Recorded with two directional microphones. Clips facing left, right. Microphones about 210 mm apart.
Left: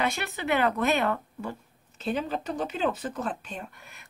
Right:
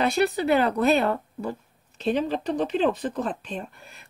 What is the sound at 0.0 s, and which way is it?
Speech, 35° right (ahead or behind).